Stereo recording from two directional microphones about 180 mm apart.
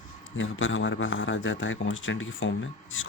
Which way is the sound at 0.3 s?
90° left.